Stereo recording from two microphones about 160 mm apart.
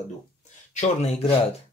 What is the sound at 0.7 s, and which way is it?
Speech, 45° left (ahead or behind).